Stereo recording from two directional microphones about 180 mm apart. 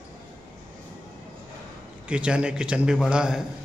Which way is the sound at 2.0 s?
5° right (ahead or behind).